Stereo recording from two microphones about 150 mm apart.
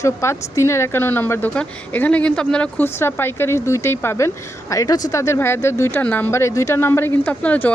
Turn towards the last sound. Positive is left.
turn(degrees=10)  # may be behind; listen again after turning